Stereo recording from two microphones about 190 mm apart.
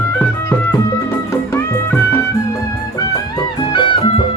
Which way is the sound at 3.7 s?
25° left (ahead or behind).